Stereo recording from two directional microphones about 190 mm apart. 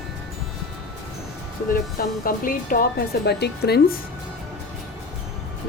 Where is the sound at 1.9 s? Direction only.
50° left (ahead or behind).